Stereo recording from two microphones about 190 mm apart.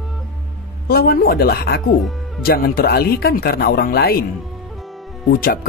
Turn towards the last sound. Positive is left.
turn(degrees=55)  # may be behind; listen again after turning